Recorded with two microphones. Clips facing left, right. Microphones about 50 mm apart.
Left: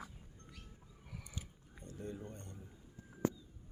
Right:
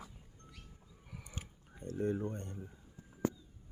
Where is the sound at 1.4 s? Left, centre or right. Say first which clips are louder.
Right 2 dB; right.